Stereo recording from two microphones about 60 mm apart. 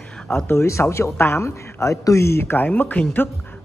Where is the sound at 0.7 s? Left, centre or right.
Left.